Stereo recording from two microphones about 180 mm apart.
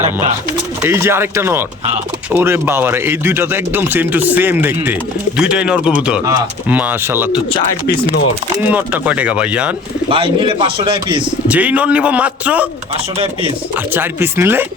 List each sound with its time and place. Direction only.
0.8 s speech: 15° right (ahead or behind)
8.5 s speech: 10° right (ahead or behind)
10.1 s a man's voice: 30° right (ahead or behind)
11.4 s speech: 5° right (ahead or behind)
13.1 s speech: 30° right (ahead or behind)
13.9 s speech: 10° right (ahead or behind)